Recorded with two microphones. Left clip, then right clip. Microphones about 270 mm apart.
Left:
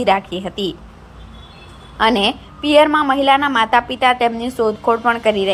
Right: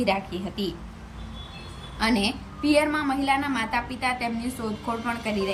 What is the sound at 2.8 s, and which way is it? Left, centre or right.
A woman's voice, left.